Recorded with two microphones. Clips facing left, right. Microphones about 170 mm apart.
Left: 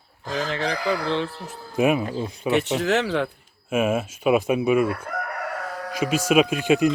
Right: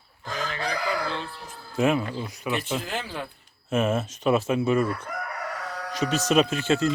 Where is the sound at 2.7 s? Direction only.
80° left.